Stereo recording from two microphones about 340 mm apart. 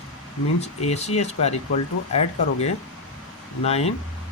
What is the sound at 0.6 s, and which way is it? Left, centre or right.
Speech, centre.